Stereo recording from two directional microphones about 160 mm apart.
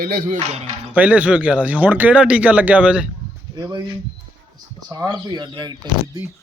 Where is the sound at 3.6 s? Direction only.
25° right (ahead or behind).